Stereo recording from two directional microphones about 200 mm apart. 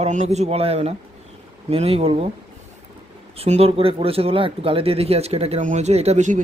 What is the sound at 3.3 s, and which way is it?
Speech, 30° right (ahead or behind).